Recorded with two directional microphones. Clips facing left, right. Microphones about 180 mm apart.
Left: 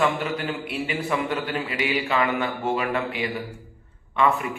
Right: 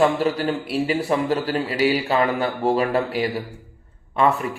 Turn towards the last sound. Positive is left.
turn(degrees=-35)  # may be behind; listen again after turning